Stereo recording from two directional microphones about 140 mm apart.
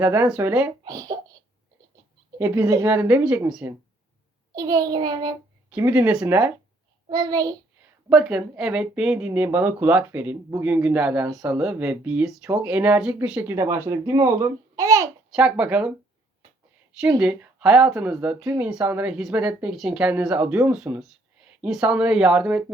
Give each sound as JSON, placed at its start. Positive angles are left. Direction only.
{"t": 0.0, "sound": "speech", "side_deg": -10}
{"t": 0.9, "sound": "a child's voice", "side_deg": -25}
{"t": 2.4, "sound": "speech", "side_deg": -20}
{"t": 4.5, "sound": "child singing", "side_deg": -25}
{"t": 5.7, "sound": "speech", "side_deg": -15}
{"t": 7.1, "sound": "child singing", "side_deg": -25}
{"t": 8.1, "sound": "speech", "side_deg": -5}
{"t": 13.6, "sound": "child singing", "side_deg": -20}
{"t": 15.3, "sound": "speech", "side_deg": -5}
{"t": 17.2, "sound": "speech", "side_deg": -5}